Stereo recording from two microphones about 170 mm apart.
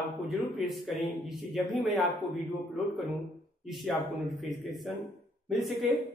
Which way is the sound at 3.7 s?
Centre (ahead or behind).